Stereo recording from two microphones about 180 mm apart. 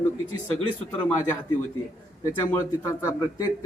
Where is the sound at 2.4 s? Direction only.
15° left (ahead or behind).